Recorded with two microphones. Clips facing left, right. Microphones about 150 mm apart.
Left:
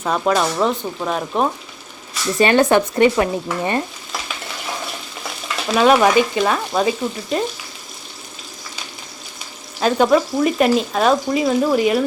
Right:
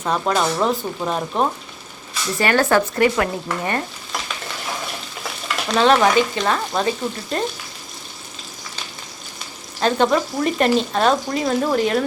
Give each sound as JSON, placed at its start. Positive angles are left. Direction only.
{"t": 0.0, "sound": "frying", "side_deg": 5}
{"t": 2.4, "sound": "stir", "side_deg": 20}
{"t": 5.6, "sound": "frying", "side_deg": 5}
{"t": 9.8, "sound": "frying", "side_deg": 5}